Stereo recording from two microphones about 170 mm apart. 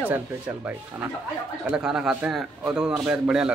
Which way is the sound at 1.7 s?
5° right (ahead or behind).